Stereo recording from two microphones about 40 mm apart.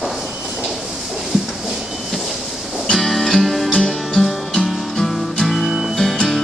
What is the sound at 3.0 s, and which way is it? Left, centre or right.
Music, centre.